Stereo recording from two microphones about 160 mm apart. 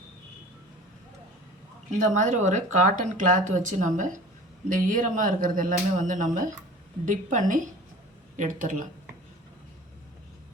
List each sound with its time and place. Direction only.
2.0 s speech: 50° right (ahead or behind)